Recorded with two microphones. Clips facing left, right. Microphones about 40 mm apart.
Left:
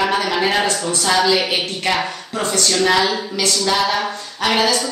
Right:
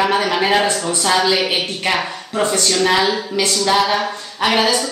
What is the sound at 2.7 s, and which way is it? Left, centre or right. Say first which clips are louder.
A woman's voice: left 1 dB; centre.